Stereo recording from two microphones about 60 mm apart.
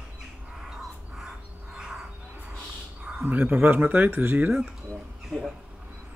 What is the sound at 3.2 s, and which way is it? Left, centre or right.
Speech, right.